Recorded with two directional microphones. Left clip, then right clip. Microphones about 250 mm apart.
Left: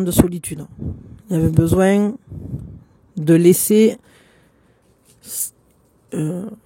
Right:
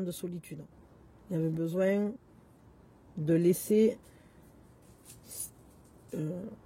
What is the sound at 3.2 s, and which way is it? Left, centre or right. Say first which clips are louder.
Speech: left 14 dB; left.